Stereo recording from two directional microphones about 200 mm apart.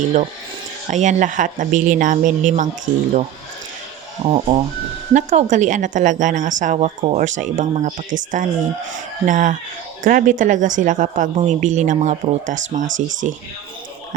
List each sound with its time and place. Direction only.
0.9 s speech: 35° right (ahead or behind)
4.2 s speech: 30° right (ahead or behind)